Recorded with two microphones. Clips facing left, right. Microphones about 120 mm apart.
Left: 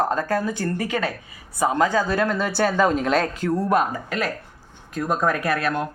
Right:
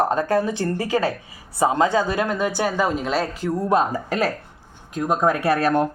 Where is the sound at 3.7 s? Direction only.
30° right (ahead or behind).